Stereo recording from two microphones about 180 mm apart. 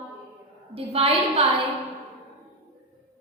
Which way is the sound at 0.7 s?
30° right (ahead or behind).